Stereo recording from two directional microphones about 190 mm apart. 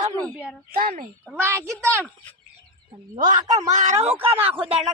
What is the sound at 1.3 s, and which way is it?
Speech, 10° right (ahead or behind).